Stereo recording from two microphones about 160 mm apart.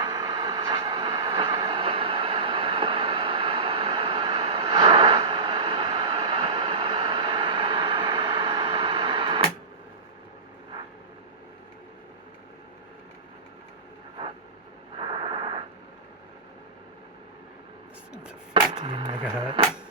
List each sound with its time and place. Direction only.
0.0 s vehicle: 25° right (ahead or behind)
14.9 s radio: 30° right (ahead or behind)
18.7 s a sound: 30° right (ahead or behind)